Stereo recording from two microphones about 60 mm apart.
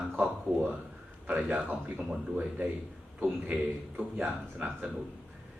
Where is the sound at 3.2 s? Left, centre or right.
Right.